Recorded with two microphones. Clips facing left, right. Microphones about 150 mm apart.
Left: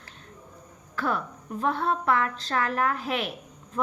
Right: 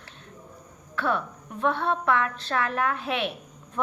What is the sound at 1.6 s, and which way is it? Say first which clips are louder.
A woman's voice: right 1 dB; 40° left (ahead or behind).